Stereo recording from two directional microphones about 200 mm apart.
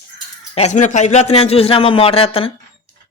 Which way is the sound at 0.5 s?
35° left (ahead or behind).